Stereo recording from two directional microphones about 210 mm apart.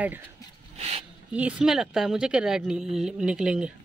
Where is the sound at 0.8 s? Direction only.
30° right (ahead or behind).